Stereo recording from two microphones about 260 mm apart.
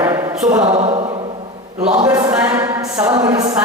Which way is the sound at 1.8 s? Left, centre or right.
Centre.